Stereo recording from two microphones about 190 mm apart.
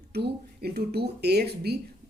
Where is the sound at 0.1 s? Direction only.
60° right (ahead or behind).